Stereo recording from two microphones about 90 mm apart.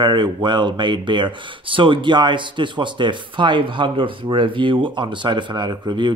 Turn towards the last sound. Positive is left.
turn(degrees=-55)  # may be behind; listen again after turning